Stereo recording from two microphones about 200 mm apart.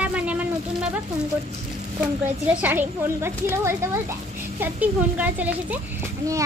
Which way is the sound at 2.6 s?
10° right (ahead or behind).